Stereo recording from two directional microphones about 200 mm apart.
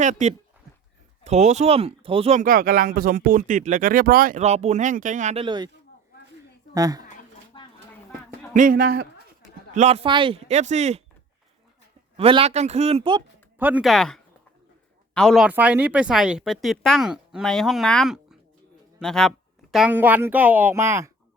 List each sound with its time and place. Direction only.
0.0 s speech: 35° right (ahead or behind)
6.7 s speech: 15° right (ahead or behind)
7.6 s a sound: 25° left (ahead or behind)
8.5 s speech: 45° right (ahead or behind)
9.7 s speech: 35° right (ahead or behind)
12.1 s speech: 30° right (ahead or behind)
13.6 s speech: 10° right (ahead or behind)
15.4 s speech: 5° right (ahead or behind)